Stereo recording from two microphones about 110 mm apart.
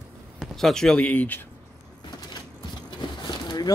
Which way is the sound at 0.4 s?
5° left (ahead or behind).